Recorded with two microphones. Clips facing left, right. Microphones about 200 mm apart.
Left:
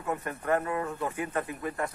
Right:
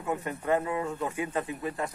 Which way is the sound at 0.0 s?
15° right (ahead or behind).